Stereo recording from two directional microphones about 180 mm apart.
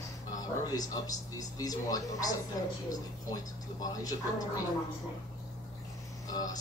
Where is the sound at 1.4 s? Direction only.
20° left (ahead or behind).